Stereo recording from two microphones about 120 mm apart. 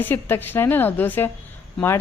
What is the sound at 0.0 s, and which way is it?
A woman's voice, 15° left (ahead or behind).